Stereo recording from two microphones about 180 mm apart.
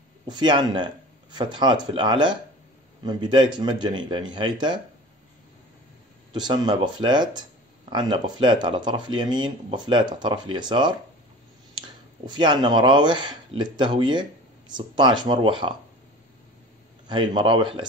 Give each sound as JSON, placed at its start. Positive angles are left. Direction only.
{"t": 0.3, "sound": "speech", "side_deg": -25}
{"t": 6.3, "sound": "speech", "side_deg": -25}
{"t": 12.3, "sound": "speech", "side_deg": -25}
{"t": 17.1, "sound": "speech", "side_deg": -25}